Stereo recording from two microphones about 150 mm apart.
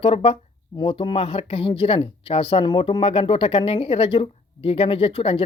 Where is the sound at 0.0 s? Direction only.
35° left (ahead or behind).